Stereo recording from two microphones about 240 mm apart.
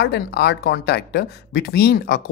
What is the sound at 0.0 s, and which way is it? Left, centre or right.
Speech, left.